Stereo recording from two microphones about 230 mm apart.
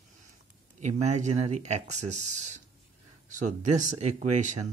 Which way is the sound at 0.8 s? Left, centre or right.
Right.